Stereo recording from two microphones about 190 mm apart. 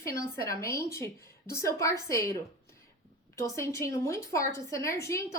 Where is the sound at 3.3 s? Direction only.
15° left (ahead or behind).